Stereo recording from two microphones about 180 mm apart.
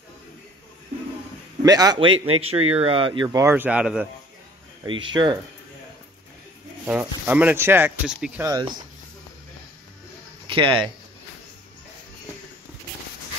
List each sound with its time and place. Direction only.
1.6 s a man's voice: 20° right (ahead or behind)
3.4 s speech: 10° right (ahead or behind)
4.8 s a man's voice: 25° right (ahead or behind)
6.9 s speech: 10° right (ahead or behind)
10.4 s a sound: 30° right (ahead or behind)